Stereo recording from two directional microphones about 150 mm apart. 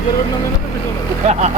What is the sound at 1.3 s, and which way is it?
Speech, 50° right (ahead or behind).